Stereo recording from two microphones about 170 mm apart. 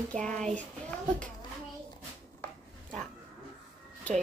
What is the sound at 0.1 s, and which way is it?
Speech, 5° left (ahead or behind).